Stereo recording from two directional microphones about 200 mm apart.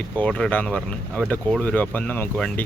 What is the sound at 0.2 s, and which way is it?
Speech, 5° left (ahead or behind).